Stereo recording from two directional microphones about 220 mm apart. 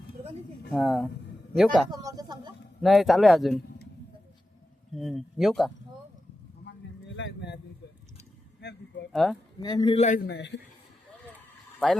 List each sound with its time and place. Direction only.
0.7 s speech: centre (ahead or behind)
1.9 s a sound: 15° right (ahead or behind)
2.8 s speech: centre (ahead or behind)
4.9 s speech: centre (ahead or behind)
7.2 s a sound: 55° left (ahead or behind)
8.6 s a sound: 50° left (ahead or behind)
9.1 s speech: centre (ahead or behind)
9.6 s a man's voice: 20° left (ahead or behind)
10.2 s a man's voice: 50° left (ahead or behind)